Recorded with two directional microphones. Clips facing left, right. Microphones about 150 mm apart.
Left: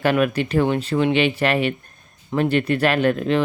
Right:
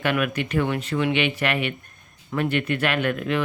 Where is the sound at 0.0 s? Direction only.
35° left (ahead or behind).